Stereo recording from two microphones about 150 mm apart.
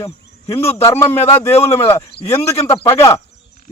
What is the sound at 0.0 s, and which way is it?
A man's voice, 20° left (ahead or behind).